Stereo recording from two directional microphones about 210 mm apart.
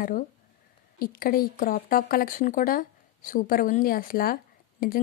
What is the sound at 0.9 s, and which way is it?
A woman's voice, 45° left (ahead or behind).